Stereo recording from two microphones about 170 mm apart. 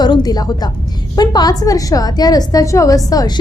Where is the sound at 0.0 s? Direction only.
25° left (ahead or behind).